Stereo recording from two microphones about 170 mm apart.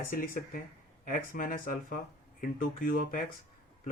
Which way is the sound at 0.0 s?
55° left (ahead or behind).